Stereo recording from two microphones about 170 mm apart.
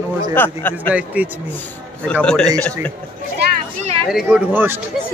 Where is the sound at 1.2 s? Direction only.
10° right (ahead or behind).